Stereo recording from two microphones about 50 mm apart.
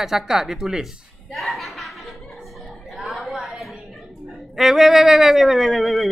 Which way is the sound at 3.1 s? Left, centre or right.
Centre.